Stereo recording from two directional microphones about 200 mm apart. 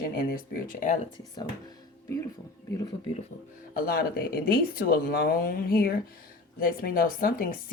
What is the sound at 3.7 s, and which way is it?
Speech, 45° left (ahead or behind).